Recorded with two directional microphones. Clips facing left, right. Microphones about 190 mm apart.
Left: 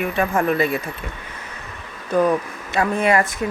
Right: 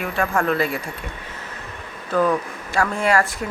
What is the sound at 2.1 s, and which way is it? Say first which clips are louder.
Speech: left 2 dB; 20° left (ahead or behind).